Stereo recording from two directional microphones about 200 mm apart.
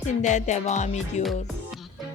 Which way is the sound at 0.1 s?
35° left (ahead or behind).